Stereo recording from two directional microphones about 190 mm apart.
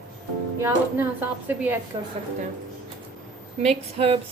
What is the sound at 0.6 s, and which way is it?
A woman's voice, 15° right (ahead or behind).